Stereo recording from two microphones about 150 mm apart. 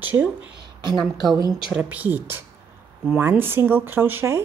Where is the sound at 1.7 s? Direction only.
10° right (ahead or behind).